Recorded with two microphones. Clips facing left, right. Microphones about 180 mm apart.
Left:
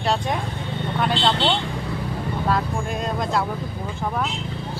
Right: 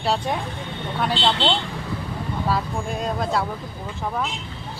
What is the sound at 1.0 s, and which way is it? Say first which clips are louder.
Speech: left 1 dB; 5° right (ahead or behind).